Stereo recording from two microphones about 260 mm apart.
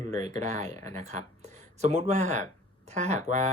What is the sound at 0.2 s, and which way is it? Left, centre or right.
Speech, right.